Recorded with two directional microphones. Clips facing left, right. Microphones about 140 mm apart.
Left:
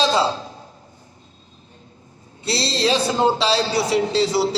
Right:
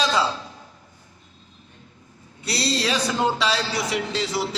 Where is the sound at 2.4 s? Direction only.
25° left (ahead or behind).